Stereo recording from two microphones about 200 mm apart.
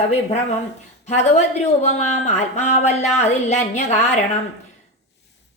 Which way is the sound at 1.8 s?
35° left (ahead or behind).